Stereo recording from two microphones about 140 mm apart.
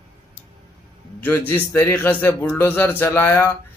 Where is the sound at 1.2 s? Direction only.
15° left (ahead or behind).